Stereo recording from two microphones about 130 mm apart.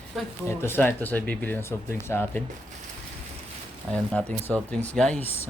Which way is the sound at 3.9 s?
10° left (ahead or behind).